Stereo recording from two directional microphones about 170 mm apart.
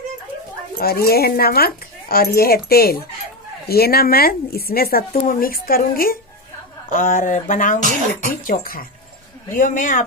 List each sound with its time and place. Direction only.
0.7 s speech: 60° left (ahead or behind)